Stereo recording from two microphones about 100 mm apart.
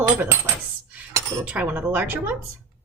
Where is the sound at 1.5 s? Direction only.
15° right (ahead or behind).